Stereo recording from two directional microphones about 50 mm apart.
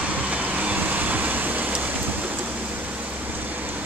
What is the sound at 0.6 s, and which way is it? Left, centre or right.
Vehicle, right.